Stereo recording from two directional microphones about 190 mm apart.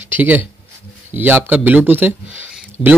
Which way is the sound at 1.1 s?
10° right (ahead or behind).